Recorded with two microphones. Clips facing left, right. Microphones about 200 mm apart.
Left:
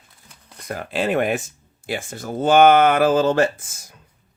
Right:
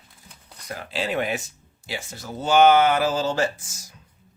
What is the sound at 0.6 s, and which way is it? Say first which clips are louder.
Speech: left 6 dB; 50° left (ahead or behind).